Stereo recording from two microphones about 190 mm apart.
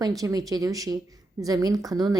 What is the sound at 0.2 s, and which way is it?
Speech, 20° right (ahead or behind).